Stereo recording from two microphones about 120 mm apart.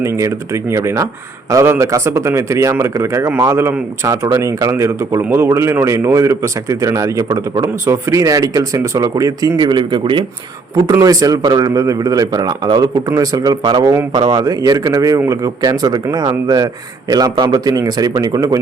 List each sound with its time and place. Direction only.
0.0 s speech: 25° right (ahead or behind); by 10.2 s 45° right (ahead or behind)
10.9 s a man's voice: 30° right (ahead or behind)
17.1 s a man's voice: 35° right (ahead or behind)